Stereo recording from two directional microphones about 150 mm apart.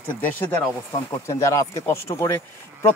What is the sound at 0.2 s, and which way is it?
A man's voice, 10° left (ahead or behind).